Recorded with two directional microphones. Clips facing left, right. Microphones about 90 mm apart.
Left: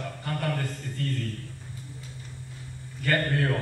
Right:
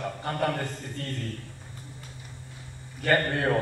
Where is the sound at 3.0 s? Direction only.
30° right (ahead or behind).